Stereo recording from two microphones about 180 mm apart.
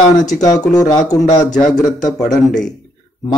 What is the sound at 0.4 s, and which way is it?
A man's voice, 20° left (ahead or behind).